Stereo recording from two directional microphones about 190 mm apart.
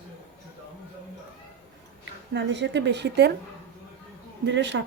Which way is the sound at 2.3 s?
70° right (ahead or behind).